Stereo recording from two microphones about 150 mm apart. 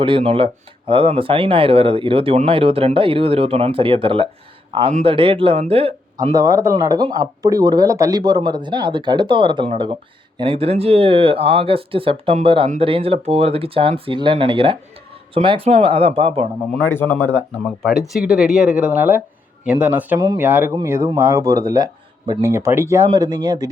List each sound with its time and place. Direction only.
0.0 s speech: 40° right (ahead or behind)
6.3 s speech: 25° right (ahead or behind); by 16.5 s 40° right (ahead or behind)
16.9 s speech: 15° left (ahead or behind)
18.1 s speech: centre (ahead or behind)
20.1 s speech: 25° right (ahead or behind)
20.4 s speech: 15° right (ahead or behind)